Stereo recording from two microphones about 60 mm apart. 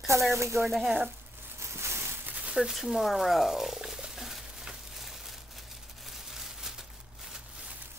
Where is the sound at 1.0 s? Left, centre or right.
Right.